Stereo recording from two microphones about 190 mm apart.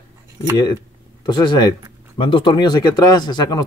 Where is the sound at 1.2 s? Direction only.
25° left (ahead or behind).